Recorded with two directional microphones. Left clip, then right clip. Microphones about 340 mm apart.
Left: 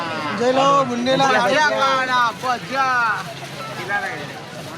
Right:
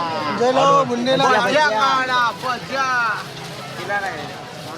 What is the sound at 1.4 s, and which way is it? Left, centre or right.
Speech, centre.